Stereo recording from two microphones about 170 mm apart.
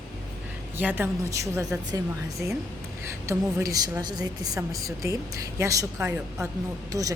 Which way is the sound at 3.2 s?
20° right (ahead or behind).